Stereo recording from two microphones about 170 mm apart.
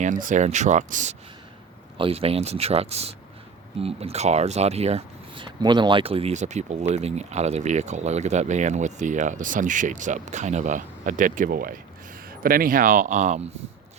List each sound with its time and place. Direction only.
0.0 s speech: 50° right (ahead or behind)
2.0 s speech: 35° right (ahead or behind)